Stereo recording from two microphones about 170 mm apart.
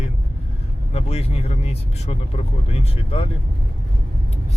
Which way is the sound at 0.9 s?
35° left (ahead or behind).